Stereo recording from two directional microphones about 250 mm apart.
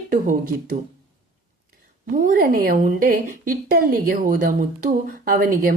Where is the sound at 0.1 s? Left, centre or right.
Right.